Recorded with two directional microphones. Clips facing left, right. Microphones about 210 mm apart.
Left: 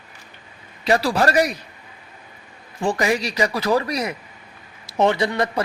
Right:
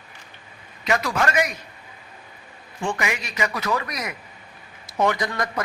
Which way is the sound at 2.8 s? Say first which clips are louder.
Left 6 dB; 35° left (ahead or behind).